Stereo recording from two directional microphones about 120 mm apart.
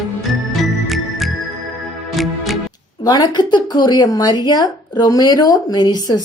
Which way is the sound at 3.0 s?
35° left (ahead or behind).